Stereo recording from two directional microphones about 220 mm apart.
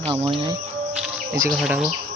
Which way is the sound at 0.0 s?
25° right (ahead or behind).